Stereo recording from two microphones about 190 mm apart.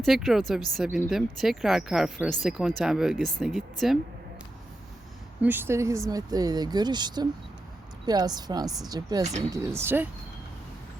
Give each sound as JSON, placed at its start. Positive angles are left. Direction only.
{"t": 0.0, "sound": "speech", "side_deg": 0}
{"t": 5.4, "sound": "speech", "side_deg": -10}